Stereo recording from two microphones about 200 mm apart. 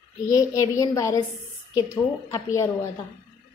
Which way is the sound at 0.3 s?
15° left (ahead or behind).